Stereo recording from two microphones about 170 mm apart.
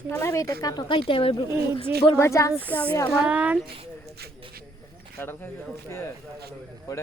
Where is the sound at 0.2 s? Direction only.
15° left (ahead or behind).